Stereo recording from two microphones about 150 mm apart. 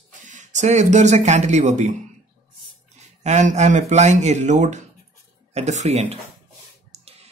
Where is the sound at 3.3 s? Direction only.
50° right (ahead or behind).